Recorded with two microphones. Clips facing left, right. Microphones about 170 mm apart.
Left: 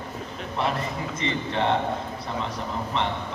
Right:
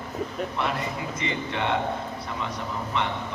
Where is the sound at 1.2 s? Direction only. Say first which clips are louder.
Left 4 dB; 35° left (ahead or behind).